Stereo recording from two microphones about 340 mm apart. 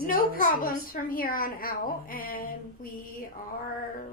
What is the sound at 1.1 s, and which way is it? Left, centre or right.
A woman's voice, left.